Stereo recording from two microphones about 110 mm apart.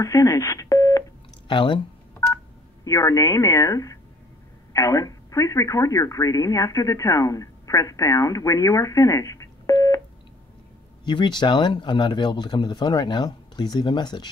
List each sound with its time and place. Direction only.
0.0 s speech: 30° left (ahead or behind)
1.5 s speech: 45° left (ahead or behind)
2.1 s telephone dialing: 30° left (ahead or behind)
4.7 s speech: 30° left (ahead or behind)
11.1 s speech: 45° left (ahead or behind)